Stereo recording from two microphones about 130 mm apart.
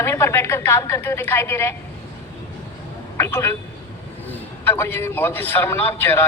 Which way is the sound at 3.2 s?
20° left (ahead or behind).